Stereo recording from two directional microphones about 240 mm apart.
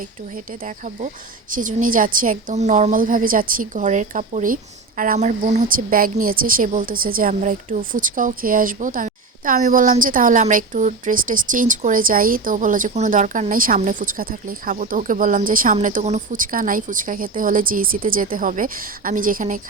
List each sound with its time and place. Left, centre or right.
1.0 s a woman's voice: right